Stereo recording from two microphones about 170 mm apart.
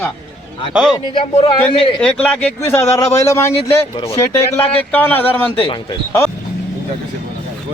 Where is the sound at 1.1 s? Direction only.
30° left (ahead or behind).